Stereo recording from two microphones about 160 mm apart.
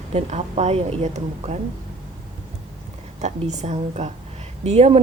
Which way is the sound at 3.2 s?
45° right (ahead or behind).